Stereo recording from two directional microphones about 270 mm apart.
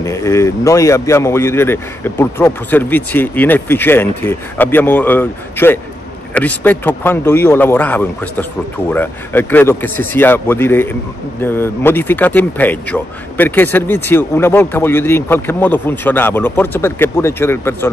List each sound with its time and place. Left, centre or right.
0.0 s speech: centre